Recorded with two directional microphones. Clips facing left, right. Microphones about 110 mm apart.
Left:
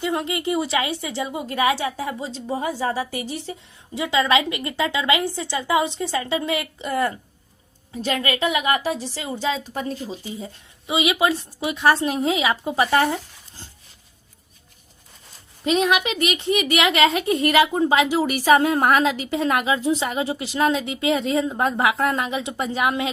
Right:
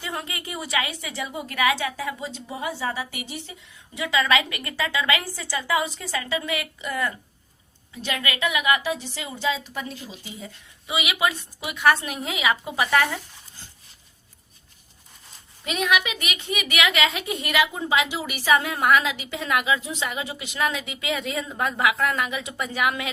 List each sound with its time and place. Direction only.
0.0 s a woman's voice: 25° left (ahead or behind)
15.6 s a woman's voice: 30° left (ahead or behind)